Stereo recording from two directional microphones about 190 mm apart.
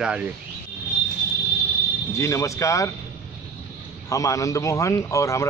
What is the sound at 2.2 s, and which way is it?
Speech, 15° left (ahead or behind).